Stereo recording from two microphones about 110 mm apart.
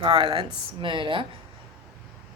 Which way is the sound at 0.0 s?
50° right (ahead or behind).